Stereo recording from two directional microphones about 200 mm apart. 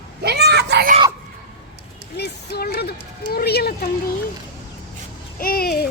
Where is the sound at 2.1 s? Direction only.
55° left (ahead or behind).